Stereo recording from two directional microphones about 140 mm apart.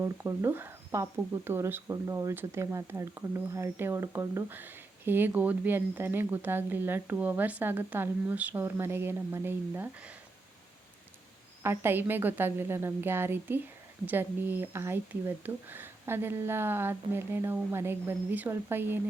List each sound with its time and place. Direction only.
0.0 s speech: 20° right (ahead or behind)
11.6 s speech: 15° right (ahead or behind)